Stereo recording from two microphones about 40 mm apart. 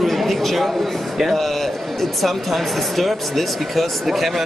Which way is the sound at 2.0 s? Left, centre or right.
Centre.